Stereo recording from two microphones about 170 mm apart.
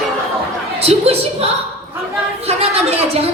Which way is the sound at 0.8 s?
35° right (ahead or behind).